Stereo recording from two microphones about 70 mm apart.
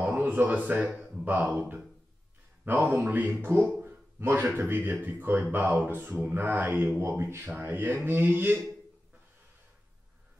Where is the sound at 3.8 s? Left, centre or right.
Right.